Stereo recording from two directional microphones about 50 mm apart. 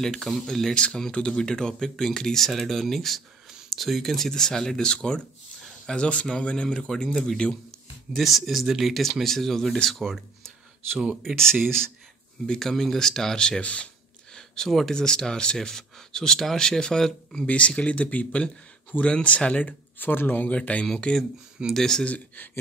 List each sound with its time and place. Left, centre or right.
0.0 s speech: centre
0.7 s speech: centre
8.2 s speech: centre
12.4 s speech: centre; by 13.8 s left
14.3 s a sound: centre
15.0 s speech: centre
17.5 s speech: left
20.0 s speech: left; by 22.0 s centre
22.0 s speech: left